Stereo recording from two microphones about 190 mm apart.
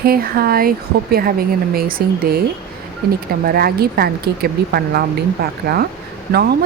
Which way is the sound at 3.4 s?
55° right (ahead or behind).